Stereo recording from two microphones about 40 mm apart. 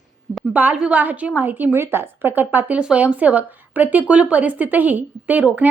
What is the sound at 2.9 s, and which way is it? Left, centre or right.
Speech, right.